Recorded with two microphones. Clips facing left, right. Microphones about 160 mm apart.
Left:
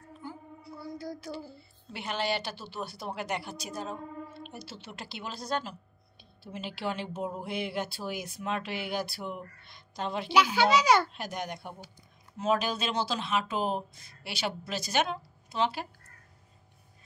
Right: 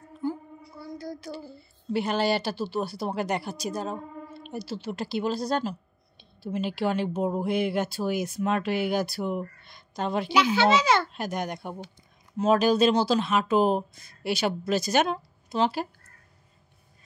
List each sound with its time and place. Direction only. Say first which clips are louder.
0.9 s a sound: right 4 dB; 10° left (ahead or behind)
1.9 s speech: right 8 dB; 40° right (ahead or behind)
10.3 s a child's voice: right 2 dB; 10° left (ahead or behind)
11.1 s speech: right 6 dB; 50° right (ahead or behind)